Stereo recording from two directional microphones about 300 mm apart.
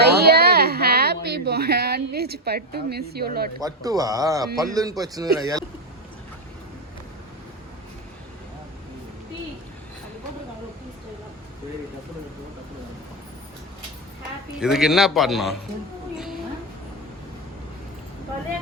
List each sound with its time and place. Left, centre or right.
0.0 s sheep: right
3.6 s a man's voice: centre
14.6 s a man's voice: centre
16.1 s a sound: centre